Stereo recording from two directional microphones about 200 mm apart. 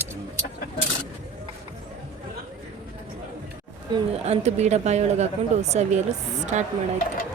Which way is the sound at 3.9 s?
30° right (ahead or behind).